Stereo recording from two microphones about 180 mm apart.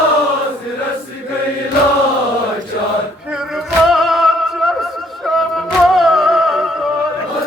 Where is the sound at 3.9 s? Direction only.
Centre (ahead or behind).